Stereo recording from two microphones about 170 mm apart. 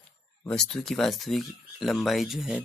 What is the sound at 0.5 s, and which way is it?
Speech, 5° left (ahead or behind).